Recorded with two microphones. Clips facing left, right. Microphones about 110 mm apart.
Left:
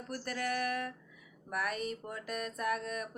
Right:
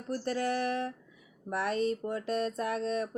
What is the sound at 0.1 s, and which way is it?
Speech, 30° right (ahead or behind).